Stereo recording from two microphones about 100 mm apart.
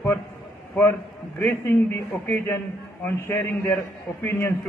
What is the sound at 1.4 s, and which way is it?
A man's voice, 20° left (ahead or behind).